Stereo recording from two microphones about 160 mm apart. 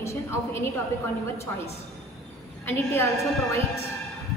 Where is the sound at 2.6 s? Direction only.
15° left (ahead or behind).